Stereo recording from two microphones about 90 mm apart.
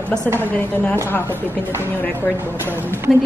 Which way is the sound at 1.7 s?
25° right (ahead or behind).